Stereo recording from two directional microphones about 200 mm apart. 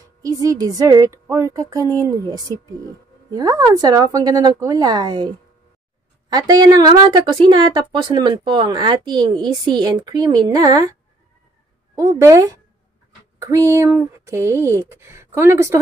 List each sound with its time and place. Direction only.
0.2 s speech: 15° right (ahead or behind)
6.3 s speech: 20° right (ahead or behind)
11.9 s speech: 15° right (ahead or behind)